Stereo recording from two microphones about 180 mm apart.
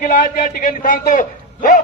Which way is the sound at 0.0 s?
50° left (ahead or behind).